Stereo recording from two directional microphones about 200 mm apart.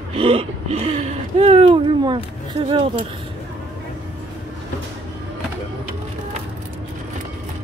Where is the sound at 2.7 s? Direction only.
25° right (ahead or behind).